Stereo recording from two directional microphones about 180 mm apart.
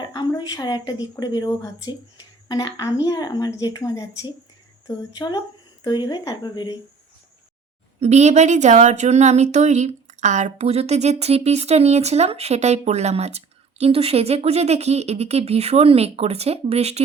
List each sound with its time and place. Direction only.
0.0 s a woman's voice: 25° left (ahead or behind)
8.0 s speech: 40° right (ahead or behind)